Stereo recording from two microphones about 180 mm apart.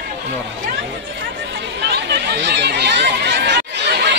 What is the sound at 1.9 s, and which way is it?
Chatter, 70° right (ahead or behind).